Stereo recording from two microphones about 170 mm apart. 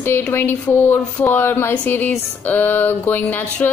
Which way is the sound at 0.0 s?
15° left (ahead or behind).